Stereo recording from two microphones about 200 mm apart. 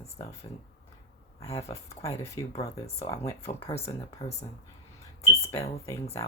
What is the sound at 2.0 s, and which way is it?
Speech, 15° left (ahead or behind).